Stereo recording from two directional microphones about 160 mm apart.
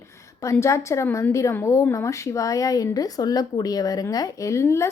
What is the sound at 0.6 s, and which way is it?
A woman's voice, 20° left (ahead or behind).